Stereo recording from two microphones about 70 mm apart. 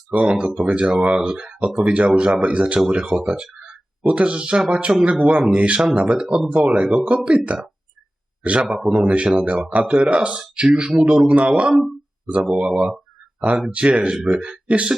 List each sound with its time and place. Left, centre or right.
0.1 s speech: centre
6.6 s speech: centre
8.6 s speech: centre
8.9 s speech: centre